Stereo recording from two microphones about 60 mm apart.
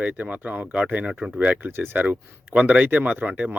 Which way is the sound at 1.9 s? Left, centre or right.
Right.